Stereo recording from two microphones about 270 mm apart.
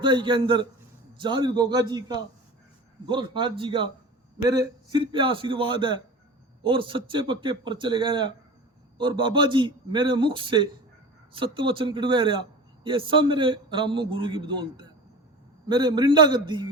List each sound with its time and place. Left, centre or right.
0.0 s a man's voice: centre